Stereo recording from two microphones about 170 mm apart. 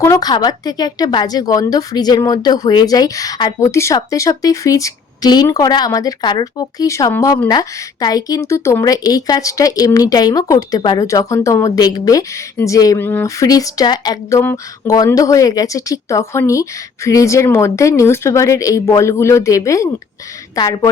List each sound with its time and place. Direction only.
0.0 s speech: 20° left (ahead or behind)